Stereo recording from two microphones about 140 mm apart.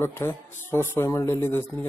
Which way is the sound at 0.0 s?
20° left (ahead or behind).